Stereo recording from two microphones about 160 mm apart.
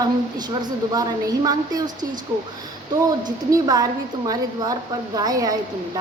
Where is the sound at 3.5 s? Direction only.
25° right (ahead or behind).